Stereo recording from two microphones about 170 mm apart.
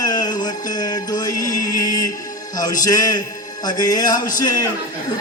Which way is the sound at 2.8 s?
20° left (ahead or behind).